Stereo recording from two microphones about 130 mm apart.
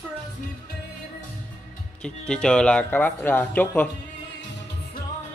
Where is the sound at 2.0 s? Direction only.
5° left (ahead or behind).